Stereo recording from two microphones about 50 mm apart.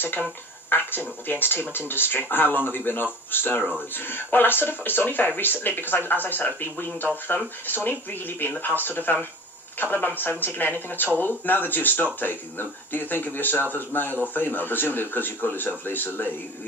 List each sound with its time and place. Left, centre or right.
0.2 s speech: left